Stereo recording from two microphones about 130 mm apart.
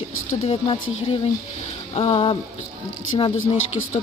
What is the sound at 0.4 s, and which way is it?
Speech, 45° left (ahead or behind).